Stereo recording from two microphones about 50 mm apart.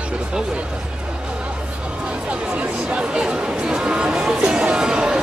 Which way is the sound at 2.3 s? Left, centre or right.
Right.